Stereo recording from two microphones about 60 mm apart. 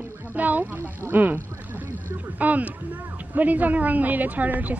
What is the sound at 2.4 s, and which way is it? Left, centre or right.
A woman's voice, right.